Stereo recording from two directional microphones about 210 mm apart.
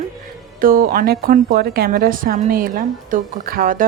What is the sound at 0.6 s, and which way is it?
A woman's voice, 40° right (ahead or behind).